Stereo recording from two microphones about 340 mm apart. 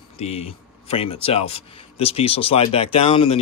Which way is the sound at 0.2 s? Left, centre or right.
Centre.